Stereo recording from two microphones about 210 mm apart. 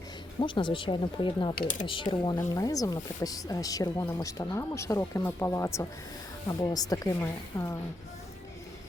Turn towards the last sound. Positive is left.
turn(degrees=10)  # may be behind; listen again after turning